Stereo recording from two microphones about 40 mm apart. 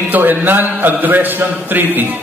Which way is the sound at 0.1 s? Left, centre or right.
Right.